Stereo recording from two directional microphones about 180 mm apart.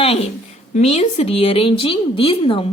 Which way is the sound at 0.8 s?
35° left (ahead or behind).